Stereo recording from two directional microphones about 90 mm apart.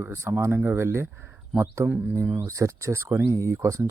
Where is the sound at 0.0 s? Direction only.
25° right (ahead or behind).